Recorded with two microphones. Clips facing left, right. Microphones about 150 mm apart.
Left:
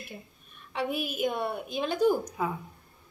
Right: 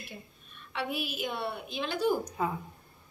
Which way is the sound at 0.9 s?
50° left (ahead or behind).